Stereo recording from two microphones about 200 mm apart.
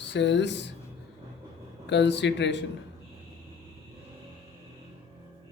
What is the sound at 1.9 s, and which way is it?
Speech, 60° left (ahead or behind).